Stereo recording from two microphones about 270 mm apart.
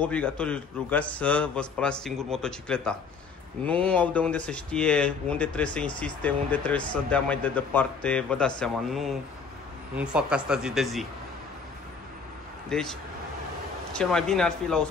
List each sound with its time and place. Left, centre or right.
0.0 s speech: centre
12.6 s speech: centre
13.9 s speech: centre